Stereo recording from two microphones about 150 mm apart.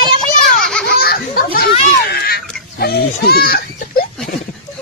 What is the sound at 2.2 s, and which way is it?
Speech, 90° left.